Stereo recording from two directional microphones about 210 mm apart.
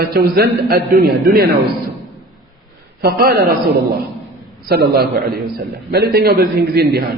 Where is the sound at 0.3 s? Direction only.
50° right (ahead or behind).